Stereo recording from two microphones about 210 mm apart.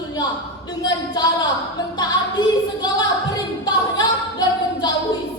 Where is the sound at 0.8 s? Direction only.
20° left (ahead or behind).